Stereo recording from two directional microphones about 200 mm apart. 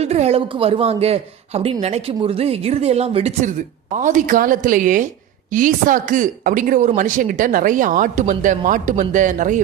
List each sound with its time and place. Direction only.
0.0 s a woman's voice: 30° right (ahead or behind)